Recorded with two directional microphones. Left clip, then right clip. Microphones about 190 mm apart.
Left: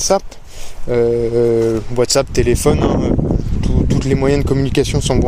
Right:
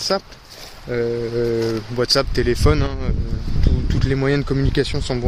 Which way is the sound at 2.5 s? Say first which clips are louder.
Left 4 dB; 20° left (ahead or behind).